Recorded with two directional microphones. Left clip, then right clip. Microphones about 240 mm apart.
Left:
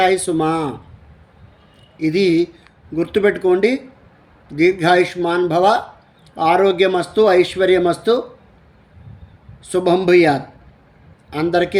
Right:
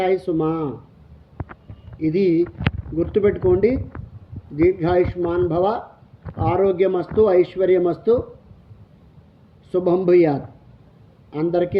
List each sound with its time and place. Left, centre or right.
0.0 s speech: centre
2.0 s speech: centre
9.6 s speech: centre